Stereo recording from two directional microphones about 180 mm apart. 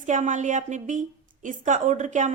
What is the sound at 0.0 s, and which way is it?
A woman's voice, 45° right (ahead or behind).